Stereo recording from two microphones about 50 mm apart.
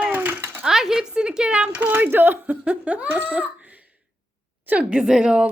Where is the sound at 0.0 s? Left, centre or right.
Right.